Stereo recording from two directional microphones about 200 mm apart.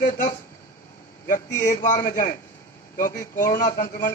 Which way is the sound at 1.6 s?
40° left (ahead or behind).